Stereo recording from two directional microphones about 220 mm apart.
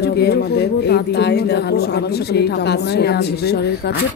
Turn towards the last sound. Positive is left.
turn(degrees=45)  # may be behind; listen again after turning